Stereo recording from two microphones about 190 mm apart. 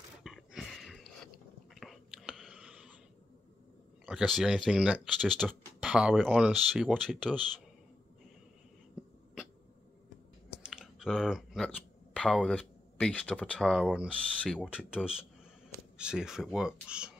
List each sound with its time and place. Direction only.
0.2 s a sound: centre (ahead or behind)
1.8 s whispering: centre (ahead or behind)
4.0 s speech: centre (ahead or behind)
10.6 s speech: 5° right (ahead or behind)
16.0 s speech: 5° right (ahead or behind)